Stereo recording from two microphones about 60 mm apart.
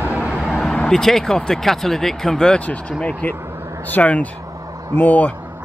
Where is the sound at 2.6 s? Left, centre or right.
Left.